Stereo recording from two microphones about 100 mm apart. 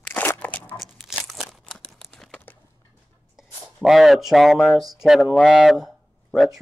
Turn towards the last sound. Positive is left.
turn(degrees=0)  # may be behind; listen again after turning